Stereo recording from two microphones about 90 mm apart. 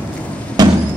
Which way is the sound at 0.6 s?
45° right (ahead or behind).